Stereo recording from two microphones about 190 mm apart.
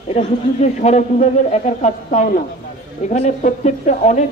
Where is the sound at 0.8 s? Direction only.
35° left (ahead or behind).